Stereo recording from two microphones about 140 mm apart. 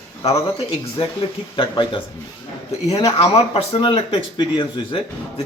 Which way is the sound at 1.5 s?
35° left (ahead or behind).